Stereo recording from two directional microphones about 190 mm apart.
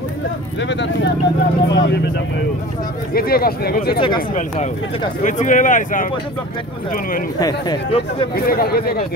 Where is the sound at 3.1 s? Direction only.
50° left (ahead or behind).